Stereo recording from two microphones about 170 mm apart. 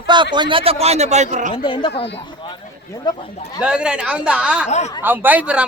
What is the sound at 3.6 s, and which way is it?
A woman's voice, 5° right (ahead or behind).